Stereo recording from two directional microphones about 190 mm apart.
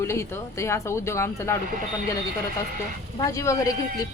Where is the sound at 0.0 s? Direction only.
15° left (ahead or behind).